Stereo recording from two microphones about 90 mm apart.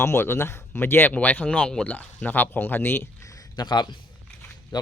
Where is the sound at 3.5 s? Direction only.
50° left (ahead or behind).